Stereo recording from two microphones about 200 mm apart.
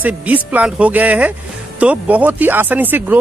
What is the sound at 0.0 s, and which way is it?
Speech, 5° right (ahead or behind).